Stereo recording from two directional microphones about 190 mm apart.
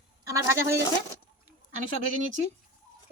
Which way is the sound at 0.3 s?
15° right (ahead or behind).